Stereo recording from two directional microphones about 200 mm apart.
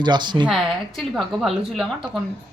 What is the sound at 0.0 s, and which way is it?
Speech, 20° right (ahead or behind).